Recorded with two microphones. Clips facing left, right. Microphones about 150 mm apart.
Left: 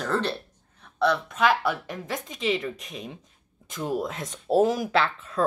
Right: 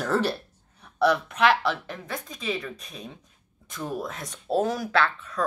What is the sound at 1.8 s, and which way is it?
Speech, 15° left (ahead or behind).